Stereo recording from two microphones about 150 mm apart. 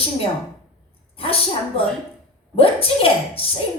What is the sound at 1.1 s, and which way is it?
Speech, 40° left (ahead or behind).